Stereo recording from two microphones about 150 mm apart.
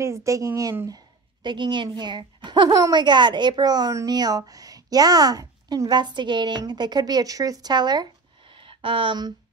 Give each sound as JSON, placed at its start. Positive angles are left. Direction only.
{"t": 0.0, "sound": "a woman's voice", "side_deg": -20}